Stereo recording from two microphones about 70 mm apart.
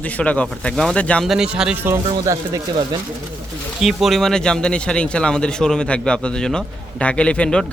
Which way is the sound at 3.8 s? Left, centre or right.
Centre.